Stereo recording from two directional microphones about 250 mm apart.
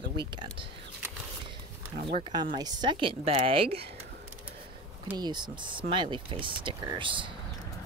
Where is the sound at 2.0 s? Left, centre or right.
Centre.